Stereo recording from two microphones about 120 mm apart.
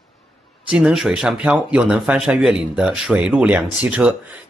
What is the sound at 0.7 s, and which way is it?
Speech, 5° right (ahead or behind).